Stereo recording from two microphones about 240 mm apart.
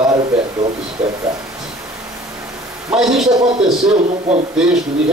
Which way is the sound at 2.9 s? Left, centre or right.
Centre.